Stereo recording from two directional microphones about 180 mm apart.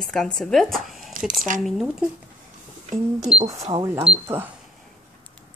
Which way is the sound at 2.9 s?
35° right (ahead or behind).